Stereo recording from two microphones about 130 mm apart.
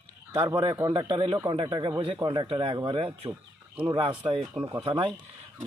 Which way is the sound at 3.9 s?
40° right (ahead or behind).